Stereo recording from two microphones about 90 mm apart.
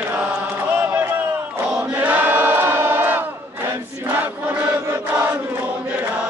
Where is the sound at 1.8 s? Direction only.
20° right (ahead or behind).